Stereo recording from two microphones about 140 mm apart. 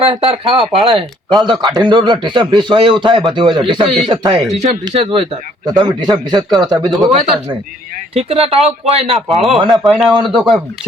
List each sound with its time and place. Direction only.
0.1 s speech: 45° right (ahead or behind)
1.3 s a man's voice: 30° right (ahead or behind)
8.1 s speech: 45° right (ahead or behind)
9.1 s speech: centre (ahead or behind)